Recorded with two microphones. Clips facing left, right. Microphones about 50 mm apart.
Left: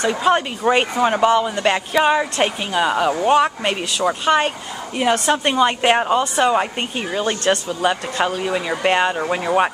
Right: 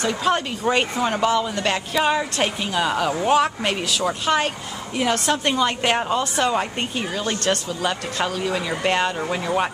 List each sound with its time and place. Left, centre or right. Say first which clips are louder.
0.0 s speech: left 4 dB; centre